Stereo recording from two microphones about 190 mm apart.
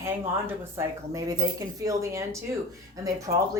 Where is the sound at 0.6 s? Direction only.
15° right (ahead or behind).